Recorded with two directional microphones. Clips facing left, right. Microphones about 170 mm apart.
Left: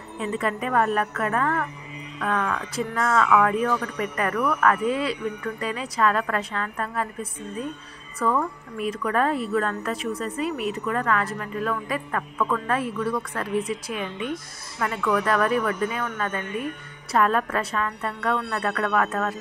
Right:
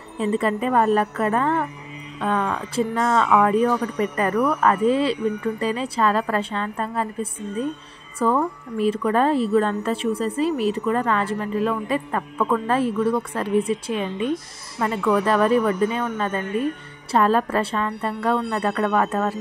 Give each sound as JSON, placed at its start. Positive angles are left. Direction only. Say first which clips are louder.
{"t": 0.2, "sound": "speech", "louder": "right 5 dB", "side_deg": -30}